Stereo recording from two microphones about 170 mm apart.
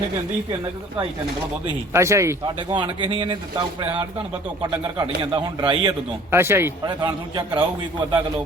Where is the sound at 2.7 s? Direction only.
30° right (ahead or behind).